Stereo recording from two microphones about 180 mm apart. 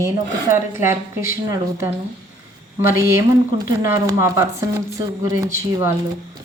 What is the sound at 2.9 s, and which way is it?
A woman's voice, 15° right (ahead or behind).